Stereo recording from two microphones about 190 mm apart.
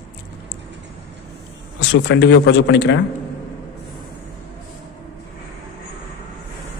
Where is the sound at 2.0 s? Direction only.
70° left (ahead or behind).